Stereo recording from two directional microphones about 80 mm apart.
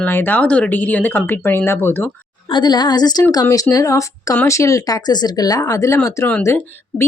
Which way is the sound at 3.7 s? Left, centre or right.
Left.